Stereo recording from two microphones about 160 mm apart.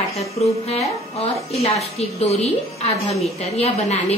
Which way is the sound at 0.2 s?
40° left (ahead or behind).